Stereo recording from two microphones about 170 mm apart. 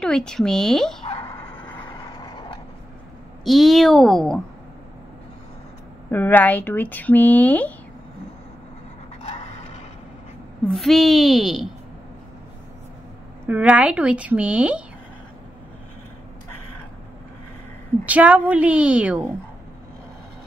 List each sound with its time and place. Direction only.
0.0 s a woman's voice: 5° left (ahead or behind)
1.0 s vehicle: 30° left (ahead or behind)
3.4 s a woman's voice: centre (ahead or behind)
6.0 s speech: 10° left (ahead or behind)
10.7 s a woman's voice: centre (ahead or behind)
13.5 s a woman's voice: 5° right (ahead or behind)
18.0 s a woman's voice: 10° right (ahead or behind)